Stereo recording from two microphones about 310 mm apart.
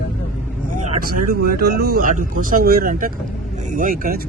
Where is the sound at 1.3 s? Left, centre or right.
Right.